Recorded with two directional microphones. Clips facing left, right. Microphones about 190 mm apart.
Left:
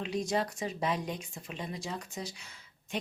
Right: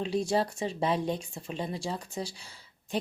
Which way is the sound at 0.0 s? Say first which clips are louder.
Right 4 dB; 30° right (ahead or behind).